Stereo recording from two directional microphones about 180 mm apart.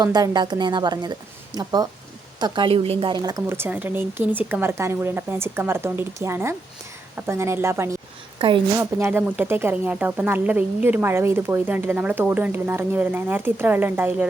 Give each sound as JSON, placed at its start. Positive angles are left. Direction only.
{"t": 0.0, "sound": "a woman's voice", "side_deg": -20}
{"t": 8.4, "sound": "a woman's voice", "side_deg": -25}
{"t": 8.8, "sound": "speech", "side_deg": -10}